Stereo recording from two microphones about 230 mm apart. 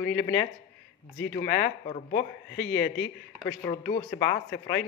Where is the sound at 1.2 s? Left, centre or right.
Left.